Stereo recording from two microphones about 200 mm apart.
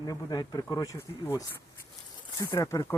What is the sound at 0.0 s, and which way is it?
Speech, 20° left (ahead or behind).